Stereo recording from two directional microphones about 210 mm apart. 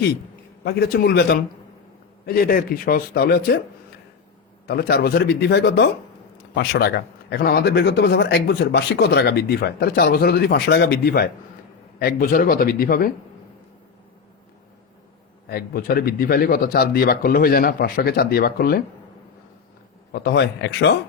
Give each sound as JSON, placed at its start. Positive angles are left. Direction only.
{"t": 0.6, "sound": "a man's voice", "side_deg": 50}
{"t": 4.6, "sound": "a man's voice", "side_deg": 50}
{"t": 15.4, "sound": "a man's voice", "side_deg": 45}
{"t": 20.1, "sound": "a man's voice", "side_deg": 50}